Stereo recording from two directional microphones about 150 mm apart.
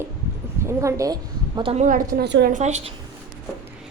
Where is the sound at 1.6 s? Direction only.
40° right (ahead or behind).